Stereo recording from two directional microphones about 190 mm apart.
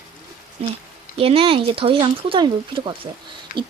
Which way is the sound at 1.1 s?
30° right (ahead or behind).